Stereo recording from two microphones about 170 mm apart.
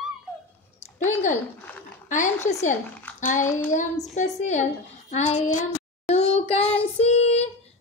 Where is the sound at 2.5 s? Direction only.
45° left (ahead or behind).